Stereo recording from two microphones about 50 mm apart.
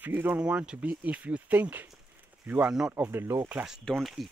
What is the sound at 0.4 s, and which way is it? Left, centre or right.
Speech, right.